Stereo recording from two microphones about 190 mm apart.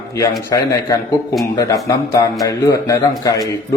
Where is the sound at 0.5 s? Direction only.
20° left (ahead or behind).